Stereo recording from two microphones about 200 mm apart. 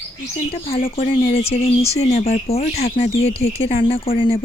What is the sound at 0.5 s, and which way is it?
Speech, 30° left (ahead or behind).